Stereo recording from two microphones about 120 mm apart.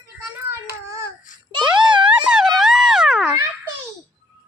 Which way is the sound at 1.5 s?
40° right (ahead or behind).